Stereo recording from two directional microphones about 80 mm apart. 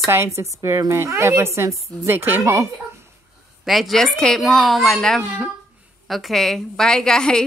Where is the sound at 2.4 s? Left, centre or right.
Right.